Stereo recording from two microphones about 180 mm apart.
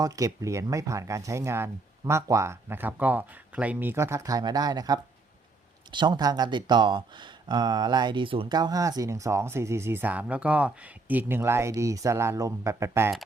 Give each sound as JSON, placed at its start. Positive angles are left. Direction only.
{"t": 0.0, "sound": "speech", "side_deg": -20}